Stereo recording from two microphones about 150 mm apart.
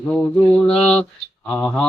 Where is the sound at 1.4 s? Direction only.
10° left (ahead or behind).